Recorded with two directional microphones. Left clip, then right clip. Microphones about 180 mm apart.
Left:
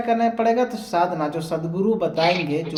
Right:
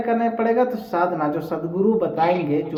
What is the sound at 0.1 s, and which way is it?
Speech, 10° left (ahead or behind).